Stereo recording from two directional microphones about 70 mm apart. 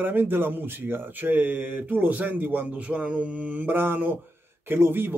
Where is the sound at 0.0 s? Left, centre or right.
Right.